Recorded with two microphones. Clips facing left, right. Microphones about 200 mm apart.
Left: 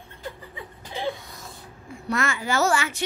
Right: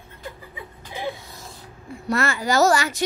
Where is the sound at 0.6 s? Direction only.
15° right (ahead or behind).